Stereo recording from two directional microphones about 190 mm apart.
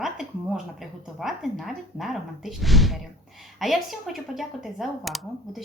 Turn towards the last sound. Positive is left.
turn(degrees=0)  # may be behind; listen again after turning